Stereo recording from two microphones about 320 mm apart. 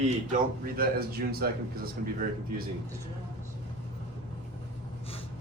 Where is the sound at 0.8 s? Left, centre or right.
Right.